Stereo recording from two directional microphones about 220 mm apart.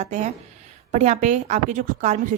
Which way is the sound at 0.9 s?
35° right (ahead or behind).